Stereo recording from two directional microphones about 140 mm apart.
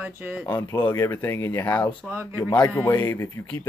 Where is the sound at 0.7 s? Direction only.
25° left (ahead or behind).